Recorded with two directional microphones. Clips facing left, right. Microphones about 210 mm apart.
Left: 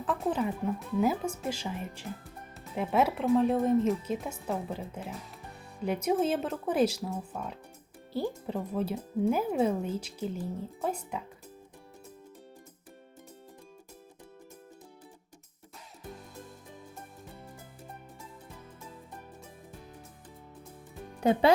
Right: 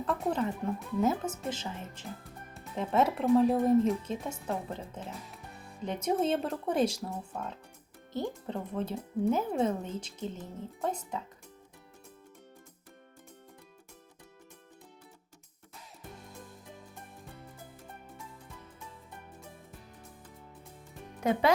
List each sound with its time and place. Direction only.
0.0 s speech: centre (ahead or behind)
21.2 s speech: 30° left (ahead or behind)